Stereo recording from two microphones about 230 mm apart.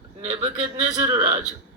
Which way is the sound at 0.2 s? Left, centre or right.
Right.